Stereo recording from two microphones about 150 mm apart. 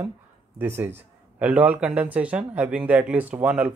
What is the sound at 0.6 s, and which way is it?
Speech, 15° right (ahead or behind).